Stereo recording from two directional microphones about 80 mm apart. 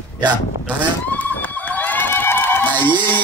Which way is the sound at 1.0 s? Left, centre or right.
Left.